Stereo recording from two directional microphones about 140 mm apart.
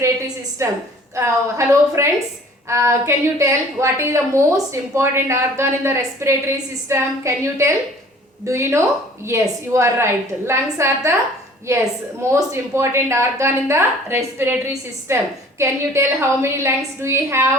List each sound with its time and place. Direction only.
0.6 s a woman's voice: 20° right (ahead or behind)